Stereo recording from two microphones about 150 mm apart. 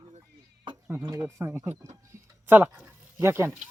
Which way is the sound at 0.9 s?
20° right (ahead or behind).